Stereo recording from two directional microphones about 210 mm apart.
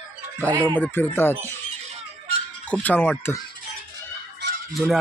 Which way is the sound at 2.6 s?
5° left (ahead or behind).